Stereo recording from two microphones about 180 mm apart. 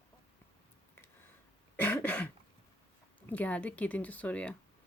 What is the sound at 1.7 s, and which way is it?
Throat clearing, 10° left (ahead or behind).